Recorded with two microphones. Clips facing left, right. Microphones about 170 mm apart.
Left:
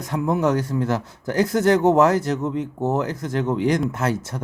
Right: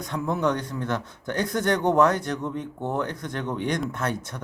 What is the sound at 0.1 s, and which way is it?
Speech, 25° left (ahead or behind).